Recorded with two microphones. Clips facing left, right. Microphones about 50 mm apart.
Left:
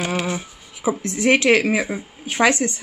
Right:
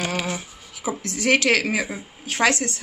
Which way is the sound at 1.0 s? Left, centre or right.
Left.